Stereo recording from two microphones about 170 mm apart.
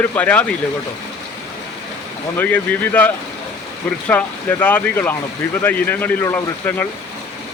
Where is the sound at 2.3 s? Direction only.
10° left (ahead or behind).